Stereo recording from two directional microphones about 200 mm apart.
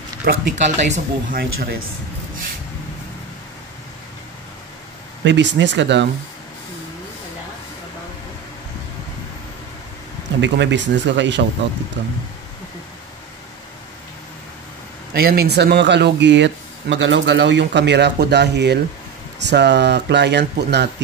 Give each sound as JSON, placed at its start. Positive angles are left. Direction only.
{"t": 0.2, "sound": "speech", "side_deg": -40}
{"t": 1.4, "sound": "speech", "side_deg": -50}
{"t": 5.2, "sound": "speech", "side_deg": -65}
{"t": 10.4, "sound": "speech", "side_deg": -60}
{"t": 15.1, "sound": "speech", "side_deg": -50}